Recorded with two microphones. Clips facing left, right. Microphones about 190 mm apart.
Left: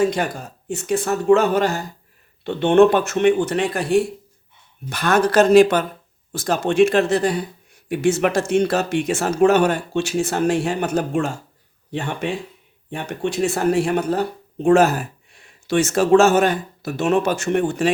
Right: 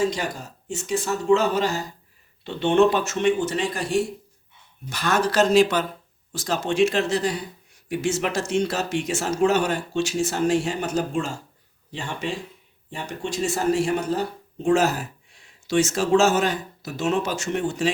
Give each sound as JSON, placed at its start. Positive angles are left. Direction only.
{"t": 0.0, "sound": "speech", "side_deg": 55}